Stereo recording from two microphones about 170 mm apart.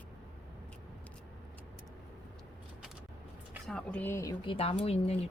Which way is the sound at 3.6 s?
5° left (ahead or behind).